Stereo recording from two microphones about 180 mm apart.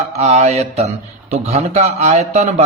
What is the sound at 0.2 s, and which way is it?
A man's voice, 35° right (ahead or behind).